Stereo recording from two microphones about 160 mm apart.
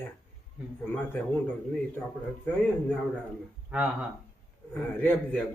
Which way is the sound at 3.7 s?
10° right (ahead or behind).